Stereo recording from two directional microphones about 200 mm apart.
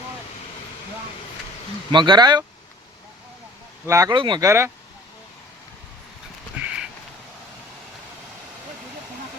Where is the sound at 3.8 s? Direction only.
15° right (ahead or behind).